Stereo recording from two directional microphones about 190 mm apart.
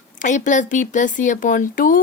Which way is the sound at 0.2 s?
40° left (ahead or behind).